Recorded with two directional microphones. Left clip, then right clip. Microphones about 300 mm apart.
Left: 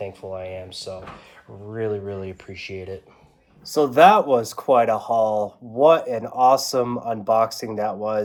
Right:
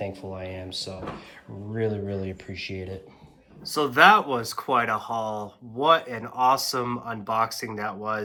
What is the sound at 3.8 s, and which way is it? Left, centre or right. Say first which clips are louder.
Speech: left 3 dB; right.